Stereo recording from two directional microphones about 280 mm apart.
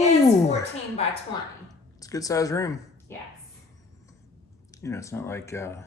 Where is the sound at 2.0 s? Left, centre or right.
Centre.